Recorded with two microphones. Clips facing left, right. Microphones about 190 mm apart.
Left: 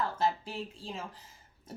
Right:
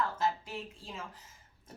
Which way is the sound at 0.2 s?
30° left (ahead or behind).